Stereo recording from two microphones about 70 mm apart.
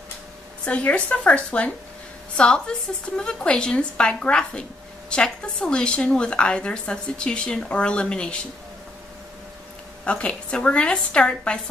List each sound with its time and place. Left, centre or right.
0.7 s a woman's voice: centre
10.0 s a woman's voice: centre